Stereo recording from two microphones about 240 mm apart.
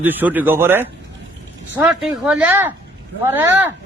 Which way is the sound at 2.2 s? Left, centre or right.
Centre.